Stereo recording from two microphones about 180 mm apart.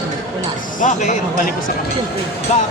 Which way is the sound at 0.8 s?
40° left (ahead or behind).